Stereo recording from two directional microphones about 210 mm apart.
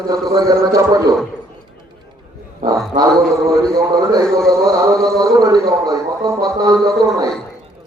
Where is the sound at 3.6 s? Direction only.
15° right (ahead or behind).